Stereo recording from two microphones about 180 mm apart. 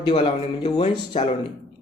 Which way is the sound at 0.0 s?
25° left (ahead or behind).